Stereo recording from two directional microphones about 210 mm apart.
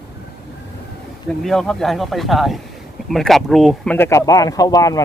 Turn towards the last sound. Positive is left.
turn(degrees=15)  # may be behind; listen again after turning